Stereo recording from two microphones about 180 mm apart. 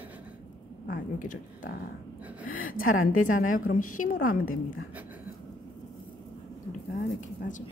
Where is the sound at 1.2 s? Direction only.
50° left (ahead or behind).